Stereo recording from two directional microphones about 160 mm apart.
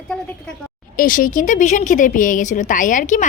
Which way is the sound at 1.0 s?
55° left (ahead or behind).